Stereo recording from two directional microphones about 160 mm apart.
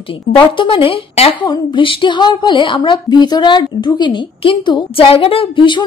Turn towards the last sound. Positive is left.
turn(degrees=30)  # may be behind; listen again after turning